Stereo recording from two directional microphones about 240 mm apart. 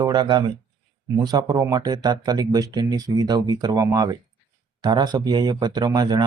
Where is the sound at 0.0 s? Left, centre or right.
Centre.